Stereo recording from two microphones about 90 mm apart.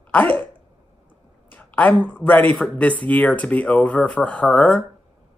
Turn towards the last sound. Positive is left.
turn(degrees=15)  # may be behind; listen again after turning